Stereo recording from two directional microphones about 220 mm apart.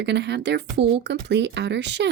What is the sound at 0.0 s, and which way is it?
Speech, 50° right (ahead or behind).